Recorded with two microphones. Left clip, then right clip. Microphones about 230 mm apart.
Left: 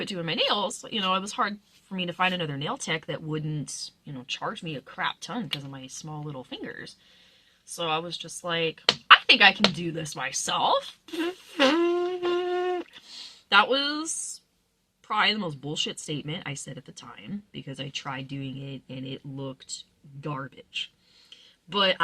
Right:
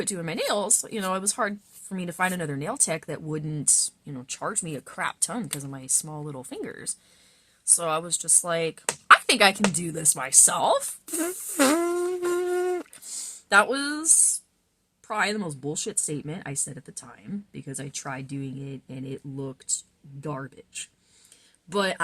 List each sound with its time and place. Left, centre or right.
0.2 s speech: right
21.7 s speech: right